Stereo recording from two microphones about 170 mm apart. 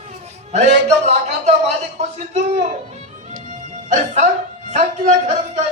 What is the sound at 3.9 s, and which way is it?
A man's voice, 45° right (ahead or behind).